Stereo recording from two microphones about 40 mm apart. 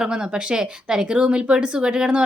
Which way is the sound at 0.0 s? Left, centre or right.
Right.